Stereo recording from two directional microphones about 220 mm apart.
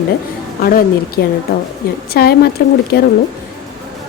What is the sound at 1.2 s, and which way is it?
A woman's voice, 45° left (ahead or behind).